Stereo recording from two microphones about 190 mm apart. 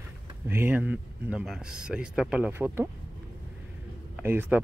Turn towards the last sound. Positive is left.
turn(degrees=-10)  # may be behind; listen again after turning